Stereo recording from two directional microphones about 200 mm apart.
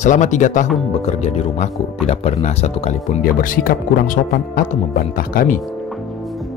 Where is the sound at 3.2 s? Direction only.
45° left (ahead or behind).